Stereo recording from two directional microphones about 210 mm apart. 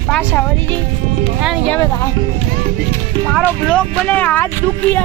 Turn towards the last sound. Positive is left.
turn(degrees=10)  # may be behind; listen again after turning